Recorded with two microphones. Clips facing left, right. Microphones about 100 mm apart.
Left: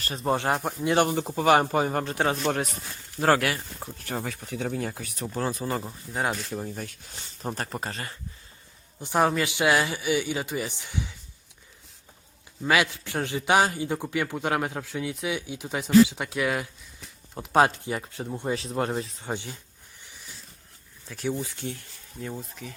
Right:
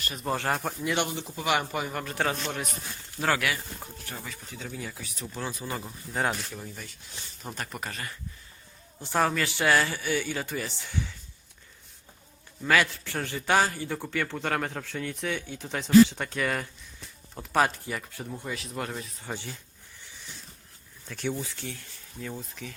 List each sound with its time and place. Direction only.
0.0 s speech: 30° left (ahead or behind)
0.9 s speech: 45° left (ahead or behind)
3.2 s speech: 35° left (ahead or behind)
4.1 s speech: 65° left (ahead or behind); by 6.8 s 45° left (ahead or behind)
7.4 s speech: 35° left (ahead or behind)
9.0 s speech: 15° left (ahead or behind)
12.6 s speech: 15° left (ahead or behind)
17.3 s speech: 20° left (ahead or behind)
21.1 s speech: 5° left (ahead or behind)
21.4 s speech: 20° left (ahead or behind)